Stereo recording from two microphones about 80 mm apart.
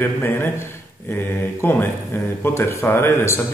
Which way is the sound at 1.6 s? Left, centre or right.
Left.